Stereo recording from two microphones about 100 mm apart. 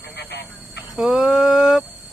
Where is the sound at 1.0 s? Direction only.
5° right (ahead or behind).